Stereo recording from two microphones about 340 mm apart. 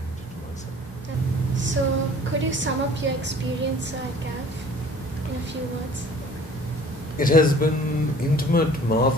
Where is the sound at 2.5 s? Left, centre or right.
Right.